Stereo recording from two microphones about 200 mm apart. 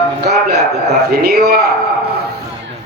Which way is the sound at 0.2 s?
55° right (ahead or behind).